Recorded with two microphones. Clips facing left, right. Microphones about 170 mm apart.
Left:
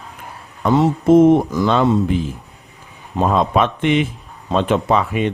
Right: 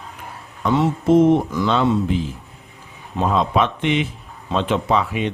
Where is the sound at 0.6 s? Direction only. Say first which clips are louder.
Left 3 dB; 45° left (ahead or behind).